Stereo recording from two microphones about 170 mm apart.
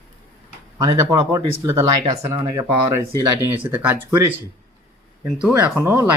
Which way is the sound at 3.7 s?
10° right (ahead or behind).